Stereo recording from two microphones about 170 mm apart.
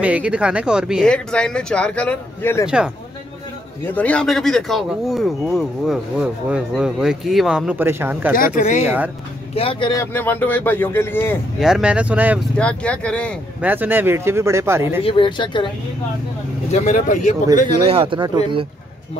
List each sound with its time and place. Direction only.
0.0 s speech: 5° right (ahead or behind); by 2.6 s 10° left (ahead or behind)
2.6 s speech: 5° right (ahead or behind)
3.8 s speech: 10° left (ahead or behind); by 8.4 s 10° right (ahead or behind)
8.5 s speech: 45° left (ahead or behind)
8.8 s speech: 10° right (ahead or behind)
9.6 s speech: 30° left (ahead or behind)
10.1 s speech: 10° left (ahead or behind)
11.6 s speech: 5° right (ahead or behind)
12.5 s speech: 5° left (ahead or behind)
13.6 s speech: 10° right (ahead or behind)
15.0 s speech: 30° left (ahead or behind)
16.7 s speech: 45° left (ahead or behind)
17.8 s speech: 35° right (ahead or behind)